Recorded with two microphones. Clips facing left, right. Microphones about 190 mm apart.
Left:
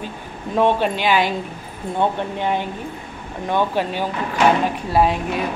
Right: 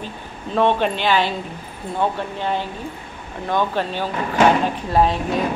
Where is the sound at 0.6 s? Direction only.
10° left (ahead or behind).